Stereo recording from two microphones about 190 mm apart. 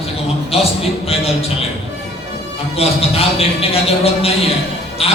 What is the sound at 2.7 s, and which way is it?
A man's voice, 30° left (ahead or behind).